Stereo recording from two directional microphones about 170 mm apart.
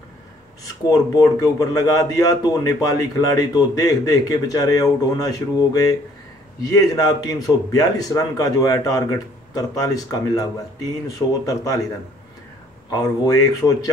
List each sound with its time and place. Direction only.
0.8 s speech: 20° left (ahead or behind)
12.9 s speech: 20° left (ahead or behind)